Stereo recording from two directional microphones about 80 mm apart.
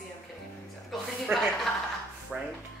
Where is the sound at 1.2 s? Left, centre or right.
Centre.